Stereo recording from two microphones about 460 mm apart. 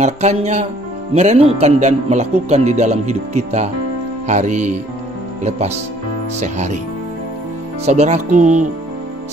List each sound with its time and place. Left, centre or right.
0.0 s speech: centre
6.4 s speech: centre
7.8 s speech: centre